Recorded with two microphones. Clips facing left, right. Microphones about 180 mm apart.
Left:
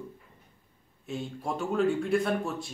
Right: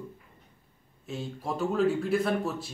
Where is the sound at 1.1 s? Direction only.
Centre (ahead or behind).